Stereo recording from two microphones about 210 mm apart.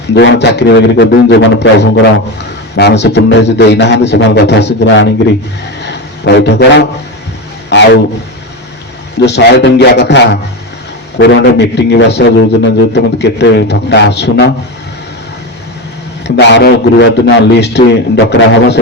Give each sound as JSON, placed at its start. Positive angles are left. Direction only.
{"t": 0.1, "sound": "a man's voice", "side_deg": 55}
{"t": 5.8, "sound": "a sound", "side_deg": 55}
{"t": 7.7, "sound": "guitar", "side_deg": 55}
{"t": 9.2, "sound": "a man's voice", "side_deg": 55}
{"t": 16.2, "sound": "a man's voice", "side_deg": 55}